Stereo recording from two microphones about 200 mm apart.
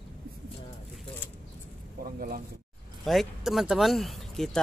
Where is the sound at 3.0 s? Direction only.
Centre (ahead or behind).